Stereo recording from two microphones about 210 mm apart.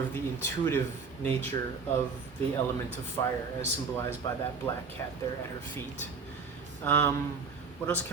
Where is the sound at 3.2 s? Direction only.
15° left (ahead or behind).